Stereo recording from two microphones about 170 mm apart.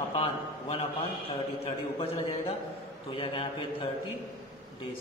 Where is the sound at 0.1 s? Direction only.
35° left (ahead or behind).